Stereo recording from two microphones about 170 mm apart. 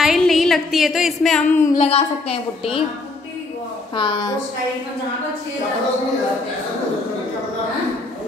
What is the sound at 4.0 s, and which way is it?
Speech, 30° left (ahead or behind).